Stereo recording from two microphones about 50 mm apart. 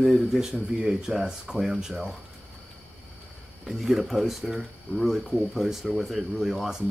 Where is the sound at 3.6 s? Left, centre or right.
Centre.